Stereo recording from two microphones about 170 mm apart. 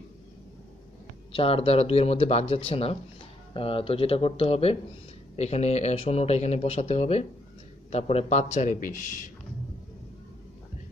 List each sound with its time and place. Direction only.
1.3 s a man's voice: 35° left (ahead or behind); by 9.3 s 50° left (ahead or behind)